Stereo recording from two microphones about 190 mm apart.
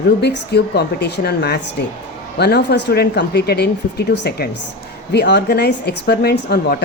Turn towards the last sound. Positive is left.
turn(degrees=55)  # may be behind; listen again after turning